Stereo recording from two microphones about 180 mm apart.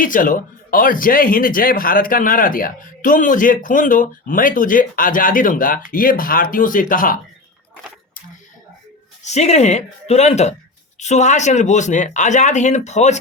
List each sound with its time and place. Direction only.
0.0 s speech: 50° left (ahead or behind)
9.2 s speech: 40° left (ahead or behind)